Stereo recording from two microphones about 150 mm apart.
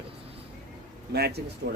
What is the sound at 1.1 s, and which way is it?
Speech, 90° right.